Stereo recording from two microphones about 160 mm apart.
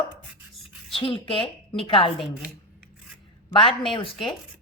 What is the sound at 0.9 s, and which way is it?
Speech, 35° left (ahead or behind).